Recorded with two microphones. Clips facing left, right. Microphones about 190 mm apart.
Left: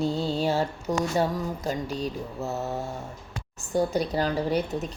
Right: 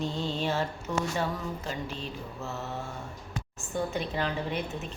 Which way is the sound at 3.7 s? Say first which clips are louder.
Left 7 dB; 40° left (ahead or behind).